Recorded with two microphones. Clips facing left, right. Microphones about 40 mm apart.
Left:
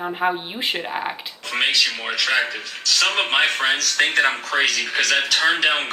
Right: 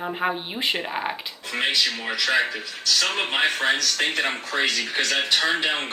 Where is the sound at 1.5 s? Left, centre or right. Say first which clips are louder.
Left 3 dB; left.